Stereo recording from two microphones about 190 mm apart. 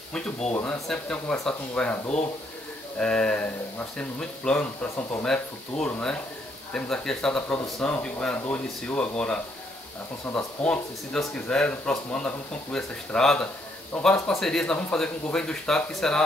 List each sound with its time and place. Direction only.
0.1 s speech: 5° left (ahead or behind)